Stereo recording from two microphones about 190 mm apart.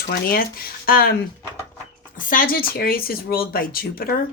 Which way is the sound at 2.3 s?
50° left (ahead or behind).